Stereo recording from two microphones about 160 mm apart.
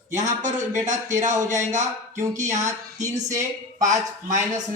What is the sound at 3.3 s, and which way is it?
Speech, 50° right (ahead or behind).